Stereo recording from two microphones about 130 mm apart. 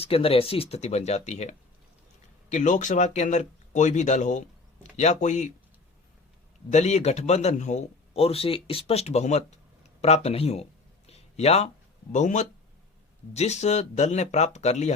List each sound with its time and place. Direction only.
0.0 s speech: 45° left (ahead or behind); by 5.5 s 65° left (ahead or behind)
6.7 s speech: 60° left (ahead or behind)
10.0 s a sound: 55° left (ahead or behind)
12.1 s speech: 70° left (ahead or behind)
13.3 s speech: 55° left (ahead or behind)